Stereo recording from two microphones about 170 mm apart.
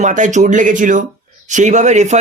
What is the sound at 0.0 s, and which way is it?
Speech, 45° right (ahead or behind).